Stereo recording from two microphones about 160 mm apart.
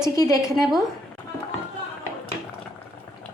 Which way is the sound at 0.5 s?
Centre (ahead or behind).